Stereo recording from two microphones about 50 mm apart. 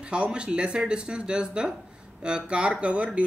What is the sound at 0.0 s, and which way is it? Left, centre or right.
Speech, right.